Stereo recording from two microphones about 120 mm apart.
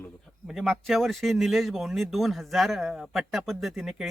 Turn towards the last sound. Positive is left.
turn(degrees=0)  # may be behind; listen again after turning